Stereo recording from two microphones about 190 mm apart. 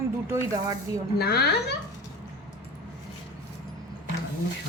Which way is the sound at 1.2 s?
55° left (ahead or behind).